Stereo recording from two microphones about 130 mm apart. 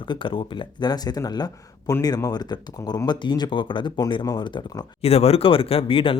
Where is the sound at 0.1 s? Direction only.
40° left (ahead or behind).